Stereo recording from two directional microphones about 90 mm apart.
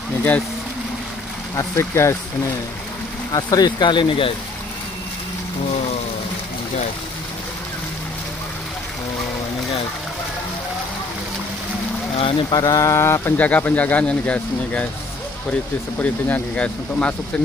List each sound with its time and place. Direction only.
1.6 s a sound: 30° left (ahead or behind)
3.3 s speech: 50° left (ahead or behind); by 4.3 s 65° left (ahead or behind)
12.2 s speech: 70° left (ahead or behind)
12.5 s a sound: 40° left (ahead or behind)
13.4 s speech: 20° left (ahead or behind)
16.0 s speech: 15° left (ahead or behind)